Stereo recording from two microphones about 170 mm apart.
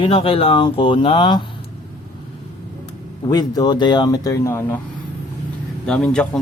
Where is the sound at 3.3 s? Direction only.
25° left (ahead or behind).